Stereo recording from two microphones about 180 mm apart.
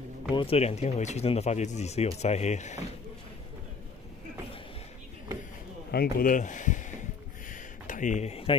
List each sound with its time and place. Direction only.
0.3 s speech: 30° left (ahead or behind)
5.9 s speech: 55° left (ahead or behind)
7.4 s a sound: 45° left (ahead or behind)